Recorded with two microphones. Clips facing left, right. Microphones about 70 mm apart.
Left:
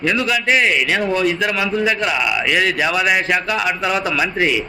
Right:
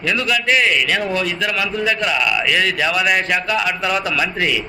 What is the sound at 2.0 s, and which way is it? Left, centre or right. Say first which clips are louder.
A man's voice: even; centre.